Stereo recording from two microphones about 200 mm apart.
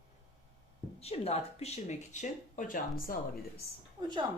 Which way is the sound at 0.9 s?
30° left (ahead or behind).